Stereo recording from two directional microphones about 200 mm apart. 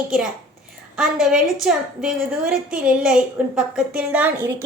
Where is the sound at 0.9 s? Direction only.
5° right (ahead or behind).